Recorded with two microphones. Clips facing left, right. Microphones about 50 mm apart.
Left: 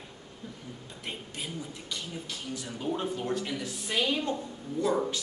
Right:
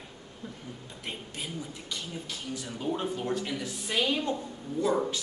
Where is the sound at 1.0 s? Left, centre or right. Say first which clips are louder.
Even; centre.